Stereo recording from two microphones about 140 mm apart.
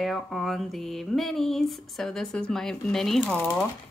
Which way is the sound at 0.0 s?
Centre (ahead or behind).